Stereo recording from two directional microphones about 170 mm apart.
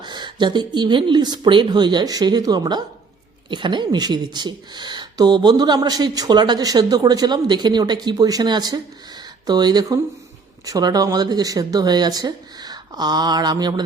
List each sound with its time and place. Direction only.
0.0 s speech: 25° right (ahead or behind)